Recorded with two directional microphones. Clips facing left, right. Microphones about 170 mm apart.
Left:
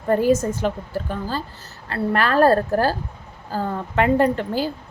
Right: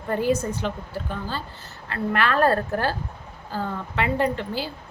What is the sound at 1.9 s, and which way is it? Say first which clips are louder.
A woman's voice: left 3 dB; 40° left (ahead or behind).